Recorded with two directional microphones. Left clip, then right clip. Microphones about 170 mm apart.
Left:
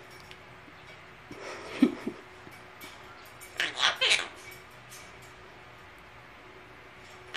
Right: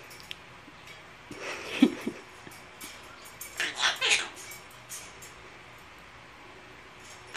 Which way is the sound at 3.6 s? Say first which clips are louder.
Left 1 dB; 20° left (ahead or behind).